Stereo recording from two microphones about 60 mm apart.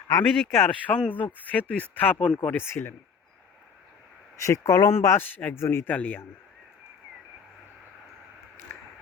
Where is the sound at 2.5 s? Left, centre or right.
Left.